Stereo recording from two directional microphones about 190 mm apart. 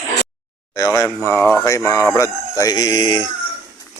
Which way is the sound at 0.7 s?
20° left (ahead or behind).